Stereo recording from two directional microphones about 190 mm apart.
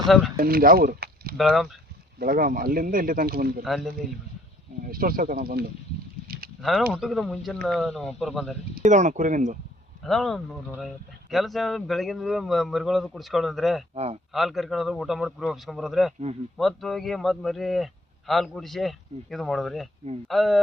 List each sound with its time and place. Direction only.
0.3 s speech: 50° right (ahead or behind)
1.4 s speech: centre (ahead or behind)
2.1 s speech: 50° right (ahead or behind)
3.6 s speech: centre (ahead or behind)
4.9 s speech: 50° right (ahead or behind)
6.2 s a sound: 50° right (ahead or behind)
6.6 s speech: centre (ahead or behind)
8.7 s speech: 40° right (ahead or behind)
10.0 s speech: centre (ahead or behind)
13.9 s speech: 35° right (ahead or behind)
14.3 s speech: centre (ahead or behind)